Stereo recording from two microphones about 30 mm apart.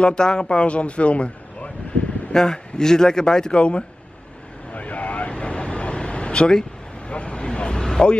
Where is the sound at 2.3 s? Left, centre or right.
Left.